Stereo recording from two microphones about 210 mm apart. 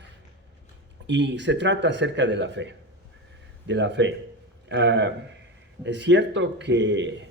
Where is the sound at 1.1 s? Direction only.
55° right (ahead or behind).